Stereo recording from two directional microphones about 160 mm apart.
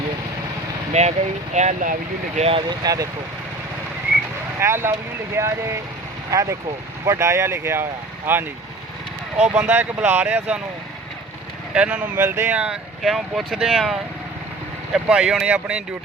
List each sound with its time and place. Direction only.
0.9 s speech: 45° right (ahead or behind); by 3.1 s 25° right (ahead or behind)
4.6 s speech: 15° right (ahead or behind)
9.5 s speech: 10° right (ahead or behind)
11.7 s speech: 5° right (ahead or behind)